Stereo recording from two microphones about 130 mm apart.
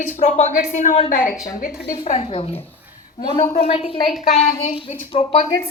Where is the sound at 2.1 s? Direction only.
50° left (ahead or behind).